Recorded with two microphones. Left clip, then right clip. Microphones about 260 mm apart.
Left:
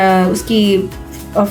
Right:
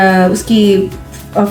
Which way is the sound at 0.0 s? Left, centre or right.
Left.